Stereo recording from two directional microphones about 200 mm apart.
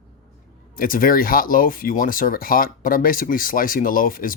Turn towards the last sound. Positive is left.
turn(degrees=45)  # may be behind; listen again after turning